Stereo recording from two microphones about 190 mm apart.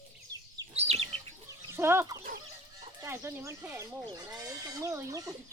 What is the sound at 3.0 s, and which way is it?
Speech, 15° right (ahead or behind).